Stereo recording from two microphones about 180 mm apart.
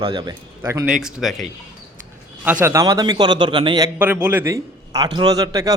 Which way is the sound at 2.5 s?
10° right (ahead or behind).